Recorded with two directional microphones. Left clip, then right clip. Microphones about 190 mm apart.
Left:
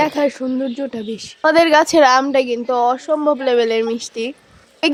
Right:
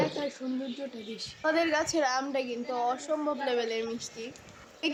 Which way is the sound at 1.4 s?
40° left (ahead or behind).